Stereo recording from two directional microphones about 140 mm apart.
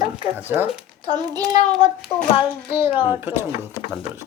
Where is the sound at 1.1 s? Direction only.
30° right (ahead or behind).